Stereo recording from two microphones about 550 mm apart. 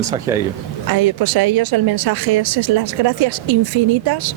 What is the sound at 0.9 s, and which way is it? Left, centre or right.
A woman's voice, right.